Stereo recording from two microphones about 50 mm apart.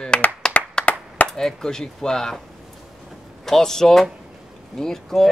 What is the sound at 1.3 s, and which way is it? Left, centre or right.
Speech, centre.